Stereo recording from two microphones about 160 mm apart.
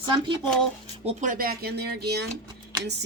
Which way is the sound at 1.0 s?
55° right (ahead or behind).